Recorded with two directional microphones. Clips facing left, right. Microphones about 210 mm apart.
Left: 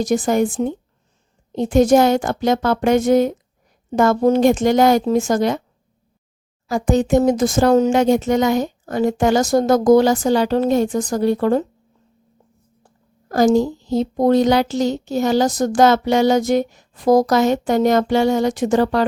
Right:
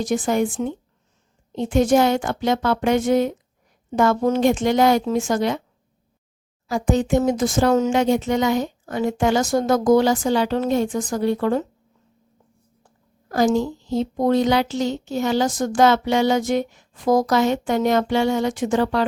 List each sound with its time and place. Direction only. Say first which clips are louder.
0.0 s speech: left 3 dB; 40° left (ahead or behind)
6.7 s speech: left 3 dB; 45° left (ahead or behind)
13.2 s speech: left 4 dB; 40° left (ahead or behind)